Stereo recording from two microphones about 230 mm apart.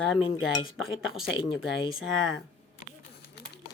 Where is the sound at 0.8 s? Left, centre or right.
Left.